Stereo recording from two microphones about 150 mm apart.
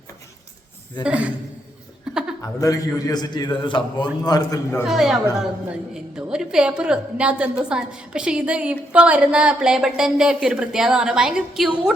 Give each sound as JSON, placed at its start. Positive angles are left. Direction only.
{"t": 1.0, "sound": "a man's voice", "side_deg": -10}
{"t": 2.4, "sound": "a man's voice", "side_deg": 25}
{"t": 4.9, "sound": "a woman's voice", "side_deg": -5}